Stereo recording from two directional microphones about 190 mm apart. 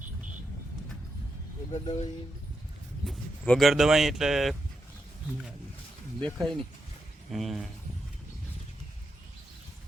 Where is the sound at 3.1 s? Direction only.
5° left (ahead or behind).